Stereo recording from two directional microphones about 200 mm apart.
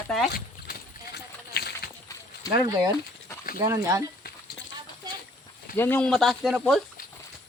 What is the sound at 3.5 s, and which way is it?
Speech, 15° right (ahead or behind).